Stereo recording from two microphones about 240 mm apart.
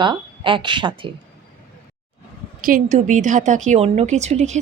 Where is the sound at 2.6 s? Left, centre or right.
Right.